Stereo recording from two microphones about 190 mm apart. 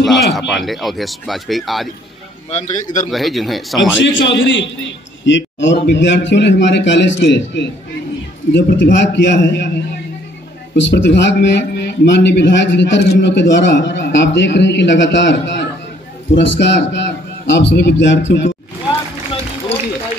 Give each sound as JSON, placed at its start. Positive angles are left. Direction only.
{"t": 0.0, "sound": "speech", "side_deg": 0}
{"t": 2.5, "sound": "a man's voice", "side_deg": 40}
{"t": 3.1, "sound": "speech", "side_deg": 0}
{"t": 4.0, "sound": "a man's voice", "side_deg": 75}
{"t": 10.8, "sound": "a man's voice", "side_deg": 70}